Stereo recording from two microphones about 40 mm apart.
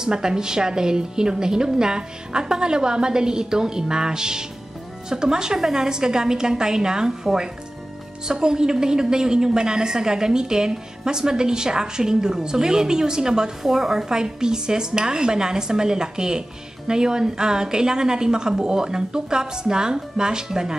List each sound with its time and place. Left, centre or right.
0.0 s a woman's voice: centre
8.3 s a woman's voice: centre